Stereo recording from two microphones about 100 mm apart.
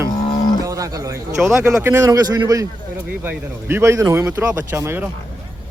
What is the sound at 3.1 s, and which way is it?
Speech, 20° right (ahead or behind).